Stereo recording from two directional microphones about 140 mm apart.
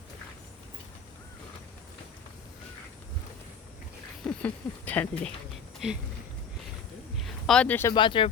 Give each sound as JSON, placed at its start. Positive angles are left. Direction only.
{"t": 4.2, "sound": "speech", "side_deg": 10}
{"t": 7.2, "sound": "a sound", "side_deg": 0}
{"t": 7.9, "sound": "speech", "side_deg": 35}